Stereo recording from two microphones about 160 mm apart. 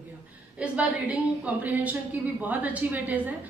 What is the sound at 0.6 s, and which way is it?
A woman's voice, 10° right (ahead or behind).